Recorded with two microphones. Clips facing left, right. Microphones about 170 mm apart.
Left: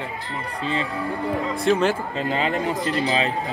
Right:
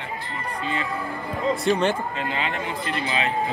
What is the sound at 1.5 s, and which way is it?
Speech, centre (ahead or behind).